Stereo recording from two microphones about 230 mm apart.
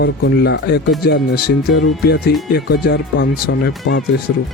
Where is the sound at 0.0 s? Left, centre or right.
Left.